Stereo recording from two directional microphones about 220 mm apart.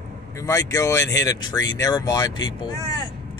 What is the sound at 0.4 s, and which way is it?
Speech, 15° left (ahead or behind).